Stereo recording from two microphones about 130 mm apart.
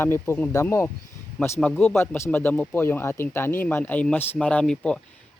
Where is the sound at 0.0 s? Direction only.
20° left (ahead or behind).